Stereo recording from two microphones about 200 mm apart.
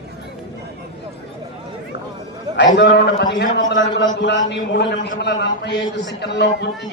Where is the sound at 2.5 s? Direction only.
60° left (ahead or behind).